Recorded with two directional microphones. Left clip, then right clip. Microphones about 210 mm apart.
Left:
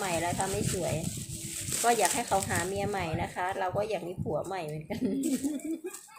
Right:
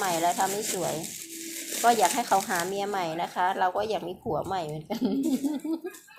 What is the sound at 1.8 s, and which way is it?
Speech, 10° right (ahead or behind).